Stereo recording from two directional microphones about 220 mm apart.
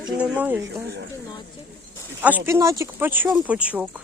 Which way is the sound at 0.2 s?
5° right (ahead or behind).